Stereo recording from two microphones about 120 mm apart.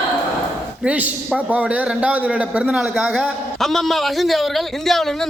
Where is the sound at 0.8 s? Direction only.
10° right (ahead or behind).